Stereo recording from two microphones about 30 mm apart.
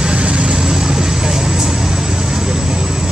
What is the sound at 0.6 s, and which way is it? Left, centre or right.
Vehicle, right.